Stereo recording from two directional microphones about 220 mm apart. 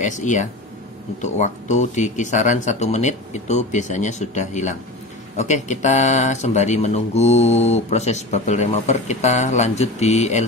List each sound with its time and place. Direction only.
0.0 s speech: 35° left (ahead or behind)